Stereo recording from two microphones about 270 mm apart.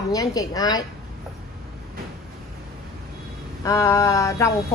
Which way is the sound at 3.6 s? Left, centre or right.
Centre.